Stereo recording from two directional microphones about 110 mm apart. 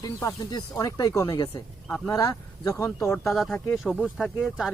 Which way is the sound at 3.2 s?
Centre (ahead or behind).